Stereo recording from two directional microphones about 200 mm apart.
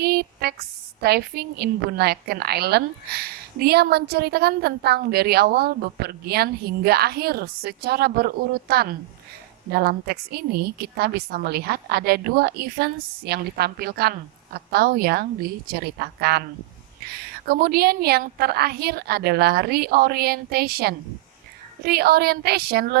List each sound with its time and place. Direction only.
0.0 s a sound: 50° right (ahead or behind)
1.0 s a woman's voice: 50° right (ahead or behind)
17.4 s a woman's voice: 50° right (ahead or behind)